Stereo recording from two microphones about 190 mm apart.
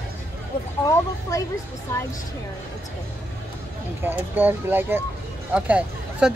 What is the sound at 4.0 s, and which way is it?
Speech, 10° right (ahead or behind).